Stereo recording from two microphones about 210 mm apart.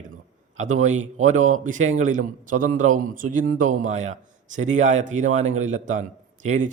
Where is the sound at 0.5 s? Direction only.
35° right (ahead or behind).